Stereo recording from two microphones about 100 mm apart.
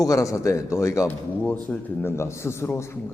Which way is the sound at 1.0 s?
15° left (ahead or behind).